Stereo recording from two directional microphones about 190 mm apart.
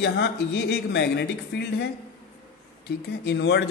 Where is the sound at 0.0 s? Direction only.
65° left (ahead or behind).